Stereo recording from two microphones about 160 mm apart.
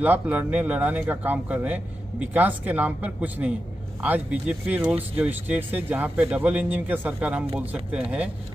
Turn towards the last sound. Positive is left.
turn(degrees=-5)  # may be behind; listen again after turning